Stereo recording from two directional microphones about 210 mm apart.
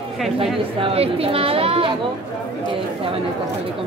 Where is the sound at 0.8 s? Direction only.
25° right (ahead or behind).